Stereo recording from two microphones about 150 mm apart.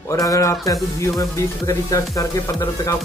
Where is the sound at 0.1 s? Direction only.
20° left (ahead or behind).